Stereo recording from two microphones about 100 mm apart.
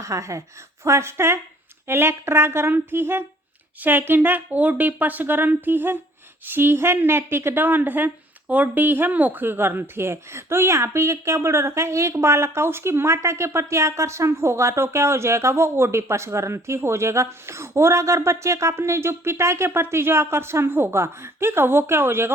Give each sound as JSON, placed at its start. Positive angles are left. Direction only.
{"t": 0.0, "sound": "a woman's voice", "side_deg": -30}